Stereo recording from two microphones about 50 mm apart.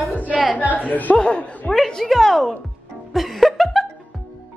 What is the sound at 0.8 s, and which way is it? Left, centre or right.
Speech, left.